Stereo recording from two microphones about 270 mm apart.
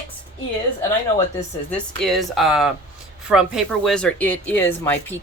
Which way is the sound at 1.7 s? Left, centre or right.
Centre.